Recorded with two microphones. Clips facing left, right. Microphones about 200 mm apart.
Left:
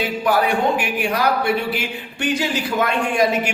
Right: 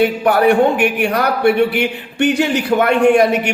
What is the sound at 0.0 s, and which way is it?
A man's voice, 60° right (ahead or behind).